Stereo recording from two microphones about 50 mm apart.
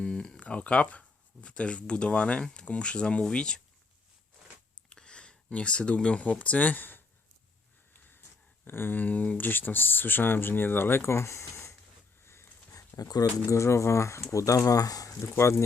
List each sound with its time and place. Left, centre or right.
0.0 s speech: centre
4.9 s speech: centre; by 7.0 s left
8.6 s speech: left
12.2 s a sound: left
13.5 s speech: left
14.3 s speech: left